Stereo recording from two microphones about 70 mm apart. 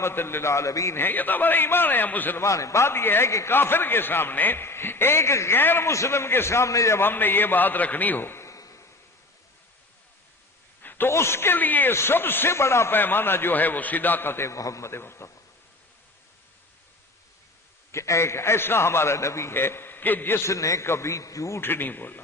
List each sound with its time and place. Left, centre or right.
0.0 s a man's voice: left
0.9 s a man's voice: left
2.4 s a man's voice: left
5.9 s a man's voice: left
7.0 s a man's voice: left
8.4 s a sound: left
10.8 s a sound: left
11.1 s a man's voice: left
17.9 s a man's voice: left
20.4 s a man's voice: left
21.6 s a man's voice: left